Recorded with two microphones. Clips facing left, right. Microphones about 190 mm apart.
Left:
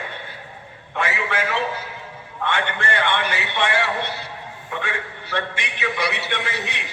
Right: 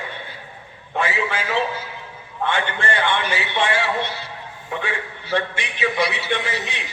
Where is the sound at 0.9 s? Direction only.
65° left (ahead or behind).